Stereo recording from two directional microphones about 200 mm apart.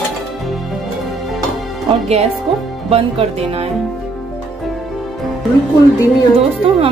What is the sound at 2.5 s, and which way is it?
Speech, 30° right (ahead or behind).